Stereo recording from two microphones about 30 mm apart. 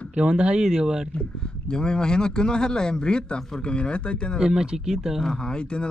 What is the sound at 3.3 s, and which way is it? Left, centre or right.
Speech, centre.